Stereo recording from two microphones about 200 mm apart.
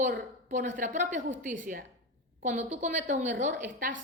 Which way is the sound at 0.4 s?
40° right (ahead or behind).